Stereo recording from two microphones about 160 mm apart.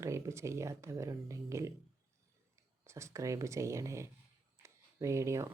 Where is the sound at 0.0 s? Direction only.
15° right (ahead or behind).